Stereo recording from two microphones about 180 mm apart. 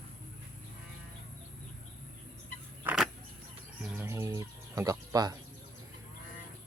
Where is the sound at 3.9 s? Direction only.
15° right (ahead or behind).